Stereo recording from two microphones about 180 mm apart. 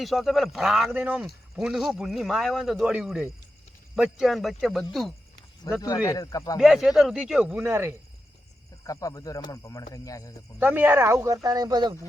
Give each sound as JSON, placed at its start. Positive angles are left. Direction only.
{"t": 0.0, "sound": "speech", "side_deg": 0}
{"t": 5.7, "sound": "speech", "side_deg": 20}
{"t": 6.6, "sound": "speech", "side_deg": -5}
{"t": 8.8, "sound": "speech", "side_deg": 20}
{"t": 10.6, "sound": "speech", "side_deg": -10}